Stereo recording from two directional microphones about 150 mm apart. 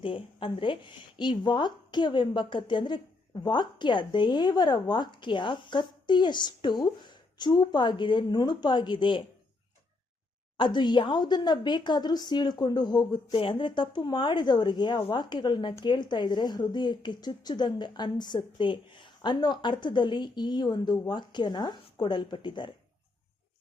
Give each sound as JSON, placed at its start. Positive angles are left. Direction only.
{"t": 0.0, "sound": "a woman's voice", "side_deg": 35}
{"t": 10.6, "sound": "a woman's voice", "side_deg": 30}